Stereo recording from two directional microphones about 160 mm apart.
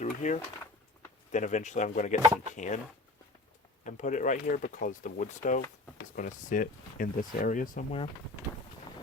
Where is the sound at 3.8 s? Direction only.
50° left (ahead or behind).